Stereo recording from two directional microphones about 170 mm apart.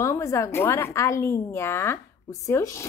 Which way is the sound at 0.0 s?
15° left (ahead or behind).